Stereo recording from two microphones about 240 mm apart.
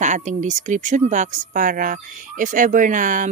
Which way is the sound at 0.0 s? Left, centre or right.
Right.